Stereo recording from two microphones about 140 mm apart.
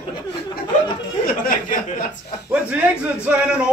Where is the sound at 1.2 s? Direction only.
90° left.